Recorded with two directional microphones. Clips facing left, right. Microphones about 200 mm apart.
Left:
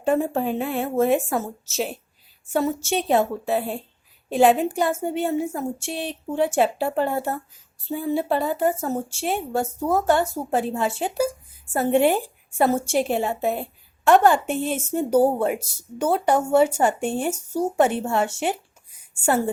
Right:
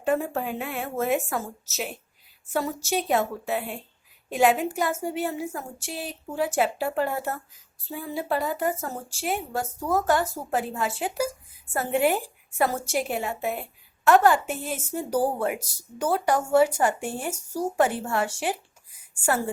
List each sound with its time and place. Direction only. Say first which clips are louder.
0.0 s a woman's voice: left 4 dB; 30° left (ahead or behind)